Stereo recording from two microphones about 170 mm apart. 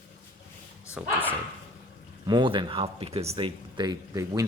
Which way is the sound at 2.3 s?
25° right (ahead or behind).